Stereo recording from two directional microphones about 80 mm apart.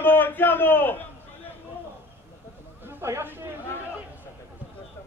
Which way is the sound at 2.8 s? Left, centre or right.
Right.